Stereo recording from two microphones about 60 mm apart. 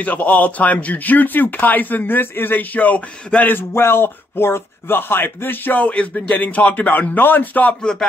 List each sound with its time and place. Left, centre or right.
0.0 s a man's voice: left
3.5 s speech: left